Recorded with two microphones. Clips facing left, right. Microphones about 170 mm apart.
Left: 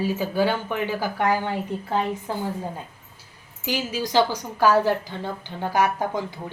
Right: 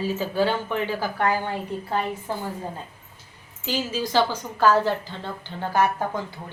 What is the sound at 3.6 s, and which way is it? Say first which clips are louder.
Speech: even; 15° left (ahead or behind).